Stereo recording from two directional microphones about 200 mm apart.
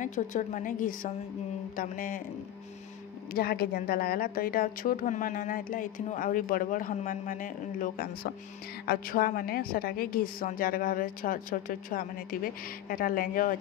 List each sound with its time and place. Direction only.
0.0 s a woman's voice: 40° left (ahead or behind)
3.3 s a woman's voice: 50° left (ahead or behind)